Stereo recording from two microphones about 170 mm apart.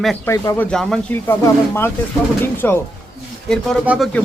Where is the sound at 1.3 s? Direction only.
15° left (ahead or behind).